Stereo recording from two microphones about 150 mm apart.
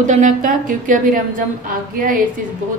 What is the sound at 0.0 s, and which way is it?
A woman's voice, 55° right (ahead or behind).